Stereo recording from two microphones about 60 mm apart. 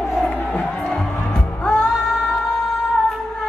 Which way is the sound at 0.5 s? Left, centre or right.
Centre.